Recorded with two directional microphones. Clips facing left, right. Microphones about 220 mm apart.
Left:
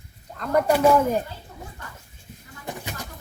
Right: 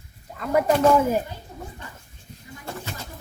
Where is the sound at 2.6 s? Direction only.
15° left (ahead or behind).